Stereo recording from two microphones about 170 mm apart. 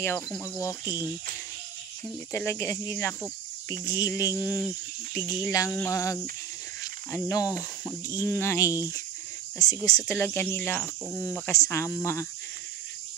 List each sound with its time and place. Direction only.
0.0 s speech: 15° left (ahead or behind)
2.3 s speech: 15° left (ahead or behind)